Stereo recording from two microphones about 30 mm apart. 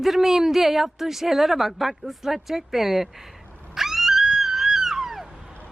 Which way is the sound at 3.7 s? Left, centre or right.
Centre.